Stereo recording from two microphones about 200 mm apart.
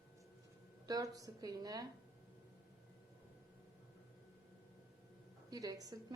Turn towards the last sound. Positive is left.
turn(degrees=-15)  # may be behind; listen again after turning